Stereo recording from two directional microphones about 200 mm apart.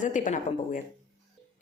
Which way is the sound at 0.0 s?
40° left (ahead or behind).